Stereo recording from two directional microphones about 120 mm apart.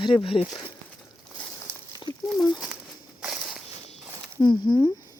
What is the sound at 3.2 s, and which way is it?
Walk, 5° right (ahead or behind).